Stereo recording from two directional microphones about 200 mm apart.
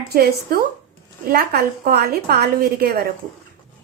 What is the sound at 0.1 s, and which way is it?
A woman's voice, 50° right (ahead or behind).